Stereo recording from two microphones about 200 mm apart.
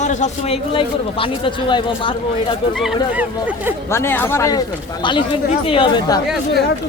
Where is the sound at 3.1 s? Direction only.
5° right (ahead or behind).